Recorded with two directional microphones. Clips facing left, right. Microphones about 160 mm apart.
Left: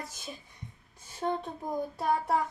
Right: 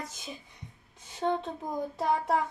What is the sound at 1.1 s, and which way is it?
Child singing, 20° right (ahead or behind).